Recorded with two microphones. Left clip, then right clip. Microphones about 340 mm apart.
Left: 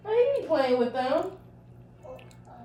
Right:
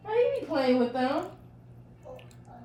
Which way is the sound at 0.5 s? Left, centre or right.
Left.